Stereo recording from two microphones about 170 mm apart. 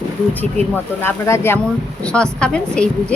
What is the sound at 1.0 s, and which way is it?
A woman's voice, 15° left (ahead or behind).